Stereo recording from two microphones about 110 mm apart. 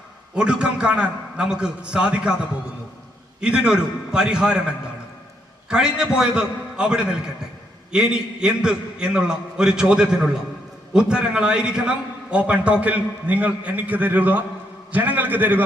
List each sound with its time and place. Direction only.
0.3 s a man's voice: 10° right (ahead or behind)
3.4 s a man's voice: 10° right (ahead or behind)
5.6 s a man's voice: 5° right (ahead or behind)